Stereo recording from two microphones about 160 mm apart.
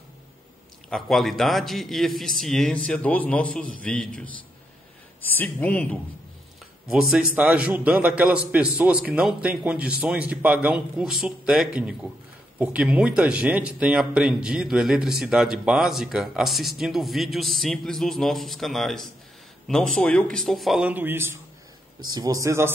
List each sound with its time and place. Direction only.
0.8 s speech: centre (ahead or behind)
6.9 s a man's voice: 5° right (ahead or behind)